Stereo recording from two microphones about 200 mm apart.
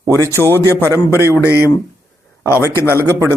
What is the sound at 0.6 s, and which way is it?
Speech, 10° right (ahead or behind).